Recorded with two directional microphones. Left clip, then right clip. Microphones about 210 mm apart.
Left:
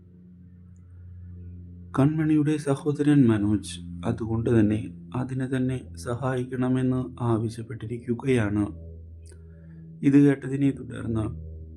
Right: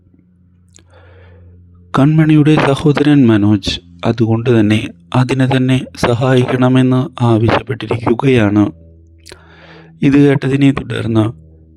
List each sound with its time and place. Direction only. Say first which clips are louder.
2.1 s speech: right 13 dB; 45° right (ahead or behind)